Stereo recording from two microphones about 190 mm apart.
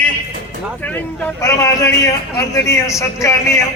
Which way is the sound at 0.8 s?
10° left (ahead or behind).